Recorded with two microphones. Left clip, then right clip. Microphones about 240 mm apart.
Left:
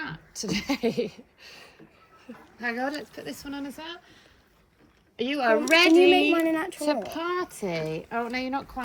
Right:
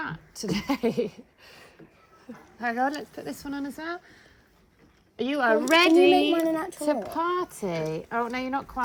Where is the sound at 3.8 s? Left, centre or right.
Left.